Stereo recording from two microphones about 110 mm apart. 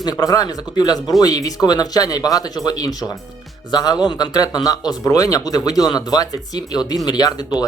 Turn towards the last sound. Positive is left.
turn(degrees=35)  # may be behind; listen again after turning